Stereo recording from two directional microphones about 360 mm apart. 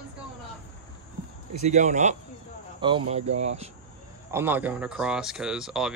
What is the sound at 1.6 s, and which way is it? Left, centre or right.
Speech, centre.